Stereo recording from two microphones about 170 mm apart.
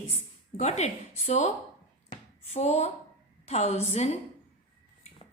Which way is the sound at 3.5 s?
40° left (ahead or behind).